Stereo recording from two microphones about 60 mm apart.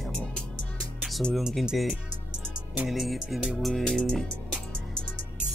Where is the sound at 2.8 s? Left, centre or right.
Centre.